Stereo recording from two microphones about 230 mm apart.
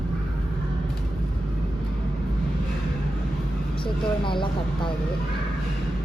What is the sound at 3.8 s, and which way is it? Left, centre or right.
Speech, left.